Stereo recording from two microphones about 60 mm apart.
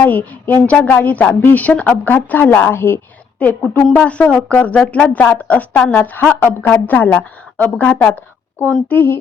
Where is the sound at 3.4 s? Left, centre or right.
Left.